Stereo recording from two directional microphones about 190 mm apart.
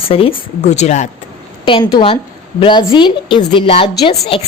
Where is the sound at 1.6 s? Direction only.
25° left (ahead or behind).